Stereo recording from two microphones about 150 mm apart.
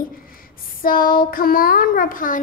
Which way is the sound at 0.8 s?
75° left (ahead or behind).